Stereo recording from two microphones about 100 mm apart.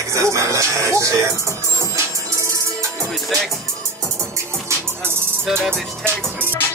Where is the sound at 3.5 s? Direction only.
30° right (ahead or behind).